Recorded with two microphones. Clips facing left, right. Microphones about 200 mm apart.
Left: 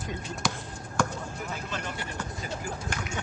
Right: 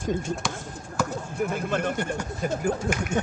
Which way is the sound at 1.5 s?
55° right (ahead or behind).